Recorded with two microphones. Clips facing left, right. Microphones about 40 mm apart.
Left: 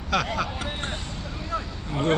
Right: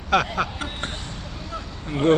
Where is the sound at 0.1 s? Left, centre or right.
Right.